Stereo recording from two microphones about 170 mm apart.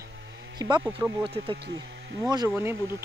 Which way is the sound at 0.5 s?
25° right (ahead or behind).